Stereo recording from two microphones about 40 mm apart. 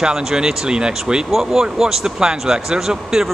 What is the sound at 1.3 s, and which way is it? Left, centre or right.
Speech, centre.